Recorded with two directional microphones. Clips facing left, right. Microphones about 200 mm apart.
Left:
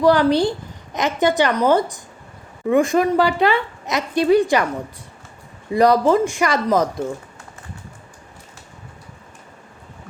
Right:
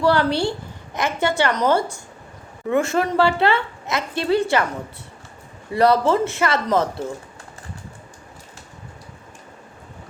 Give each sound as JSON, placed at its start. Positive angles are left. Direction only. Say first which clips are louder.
{"t": 0.0, "sound": "a woman's voice", "louder": "left 4 dB", "side_deg": 15}
{"t": 5.7, "sound": "a woman's voice", "louder": "left 2 dB", "side_deg": 15}